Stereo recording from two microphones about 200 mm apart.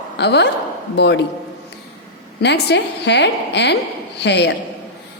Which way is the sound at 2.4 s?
60° left (ahead or behind).